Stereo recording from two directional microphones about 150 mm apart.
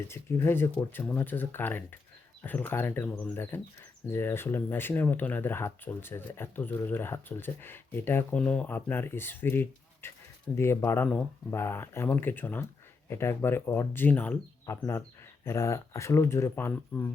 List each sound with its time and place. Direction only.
0.1 s speech: 15° left (ahead or behind)